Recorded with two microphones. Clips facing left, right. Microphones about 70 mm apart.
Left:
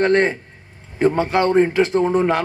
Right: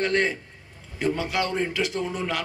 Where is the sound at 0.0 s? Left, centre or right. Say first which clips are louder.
Left 8 dB; left.